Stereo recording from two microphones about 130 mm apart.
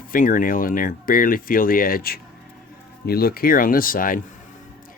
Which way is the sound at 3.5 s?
90° left.